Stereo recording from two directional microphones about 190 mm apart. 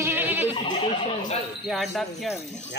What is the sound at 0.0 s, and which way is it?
Goat, 10° right (ahead or behind).